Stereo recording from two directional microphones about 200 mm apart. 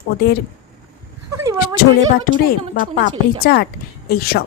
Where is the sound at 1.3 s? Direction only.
15° right (ahead or behind).